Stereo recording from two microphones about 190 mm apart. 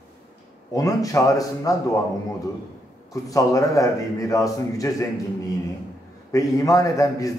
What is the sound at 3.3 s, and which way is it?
A man's voice, 15° left (ahead or behind).